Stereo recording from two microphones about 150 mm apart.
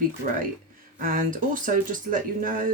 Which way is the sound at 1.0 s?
60° right (ahead or behind).